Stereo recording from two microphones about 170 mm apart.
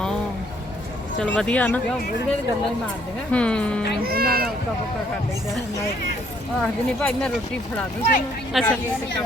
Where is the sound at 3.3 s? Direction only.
5° left (ahead or behind).